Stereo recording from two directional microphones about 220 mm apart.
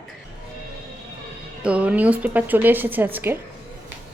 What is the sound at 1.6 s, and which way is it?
Speech, 5° right (ahead or behind).